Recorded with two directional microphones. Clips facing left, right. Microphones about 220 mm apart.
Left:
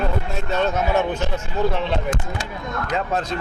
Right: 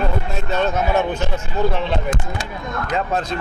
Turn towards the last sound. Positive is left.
turn(degrees=-15)  # may be behind; listen again after turning